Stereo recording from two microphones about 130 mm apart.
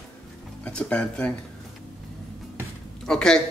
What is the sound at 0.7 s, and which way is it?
Speech, 10° left (ahead or behind).